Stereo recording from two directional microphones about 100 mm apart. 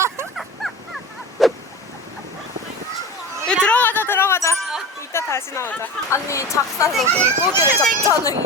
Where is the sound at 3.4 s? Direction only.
10° left (ahead or behind); by 4.5 s 25° left (ahead or behind).